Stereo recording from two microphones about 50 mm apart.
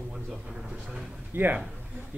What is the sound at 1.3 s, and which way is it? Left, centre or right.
Speech, right.